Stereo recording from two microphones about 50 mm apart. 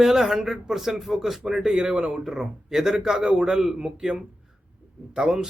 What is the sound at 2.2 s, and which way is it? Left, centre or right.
Speech, centre.